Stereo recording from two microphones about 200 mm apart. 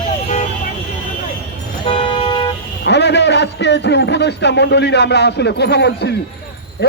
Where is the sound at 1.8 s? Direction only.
25° left (ahead or behind).